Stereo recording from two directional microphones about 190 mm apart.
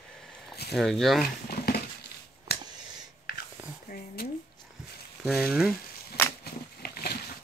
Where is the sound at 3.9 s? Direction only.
50° left (ahead or behind).